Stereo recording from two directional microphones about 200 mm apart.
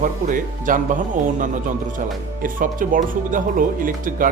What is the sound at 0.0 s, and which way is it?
Speech, 40° right (ahead or behind).